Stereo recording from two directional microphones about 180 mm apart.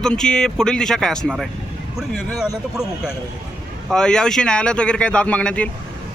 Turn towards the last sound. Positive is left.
turn(degrees=5)  # may be behind; listen again after turning